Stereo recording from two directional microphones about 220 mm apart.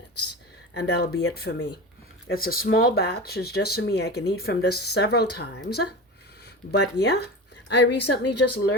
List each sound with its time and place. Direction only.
0.7 s speech: 50° left (ahead or behind)